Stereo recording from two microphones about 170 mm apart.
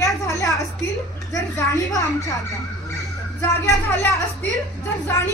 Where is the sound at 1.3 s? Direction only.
20° left (ahead or behind).